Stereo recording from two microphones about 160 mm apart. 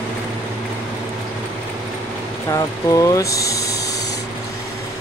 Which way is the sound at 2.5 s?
20° left (ahead or behind).